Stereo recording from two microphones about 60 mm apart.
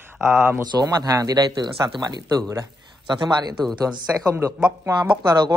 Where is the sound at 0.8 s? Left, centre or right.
Right.